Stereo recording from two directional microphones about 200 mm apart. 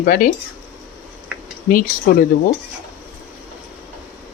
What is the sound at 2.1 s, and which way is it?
Speech, 45° left (ahead or behind).